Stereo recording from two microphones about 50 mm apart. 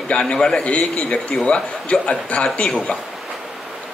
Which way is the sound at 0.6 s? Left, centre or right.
Left.